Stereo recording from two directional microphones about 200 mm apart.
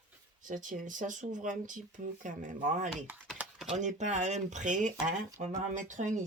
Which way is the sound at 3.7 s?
35° right (ahead or behind).